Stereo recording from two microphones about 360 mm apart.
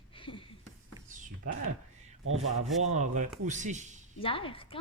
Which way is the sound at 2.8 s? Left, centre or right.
Centre.